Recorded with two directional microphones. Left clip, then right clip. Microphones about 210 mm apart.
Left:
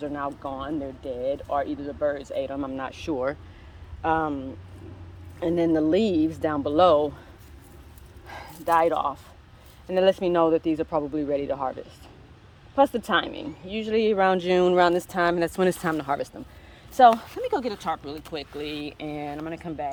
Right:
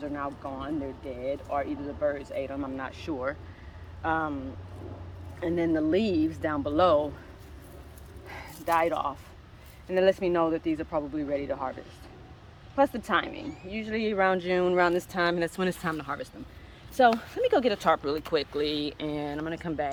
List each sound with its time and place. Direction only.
0.0 s speech: 35° left (ahead or behind)
5.4 s speech: 40° left (ahead or behind)
8.3 s speech: 30° left (ahead or behind)
12.7 s speech: 35° left (ahead or behind)
16.9 s a woman's voice: 15° left (ahead or behind)
17.4 s speech: 10° right (ahead or behind)